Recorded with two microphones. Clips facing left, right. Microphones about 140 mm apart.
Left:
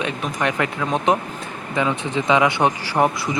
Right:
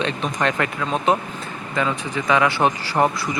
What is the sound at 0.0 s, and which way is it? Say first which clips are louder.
Speech: right 1 dB; 10° left (ahead or behind).